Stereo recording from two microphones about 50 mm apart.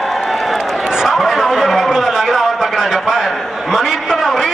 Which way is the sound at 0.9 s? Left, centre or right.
Centre.